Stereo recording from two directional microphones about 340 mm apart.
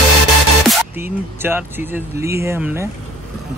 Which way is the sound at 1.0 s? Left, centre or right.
Centre.